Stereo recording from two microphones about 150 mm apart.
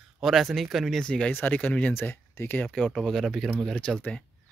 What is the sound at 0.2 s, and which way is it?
Speech, centre (ahead or behind).